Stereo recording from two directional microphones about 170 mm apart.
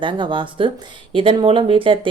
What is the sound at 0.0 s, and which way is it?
Speech, 30° right (ahead or behind).